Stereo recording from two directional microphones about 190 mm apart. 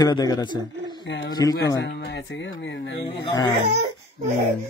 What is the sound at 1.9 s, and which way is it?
Speech, 60° left (ahead or behind).